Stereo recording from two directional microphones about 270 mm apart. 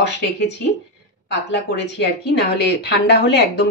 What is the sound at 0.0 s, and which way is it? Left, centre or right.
Speech, left.